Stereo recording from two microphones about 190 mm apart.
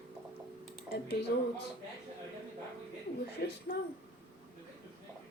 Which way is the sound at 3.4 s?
55° left (ahead or behind).